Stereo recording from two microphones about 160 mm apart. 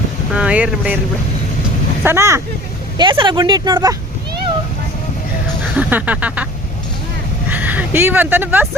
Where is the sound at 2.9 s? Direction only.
30° right (ahead or behind).